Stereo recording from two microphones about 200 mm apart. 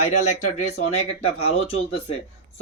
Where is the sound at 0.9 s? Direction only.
30° left (ahead or behind).